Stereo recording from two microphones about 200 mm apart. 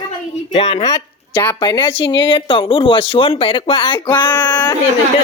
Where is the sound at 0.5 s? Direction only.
25° left (ahead or behind).